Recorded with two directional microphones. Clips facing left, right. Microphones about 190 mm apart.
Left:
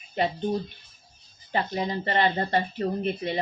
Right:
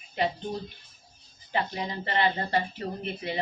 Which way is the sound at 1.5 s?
35° left (ahead or behind).